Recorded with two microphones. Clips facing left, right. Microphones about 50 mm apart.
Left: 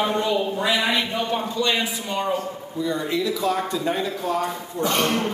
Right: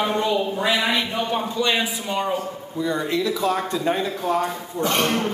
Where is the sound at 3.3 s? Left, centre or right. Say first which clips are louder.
Right 1 dB; right.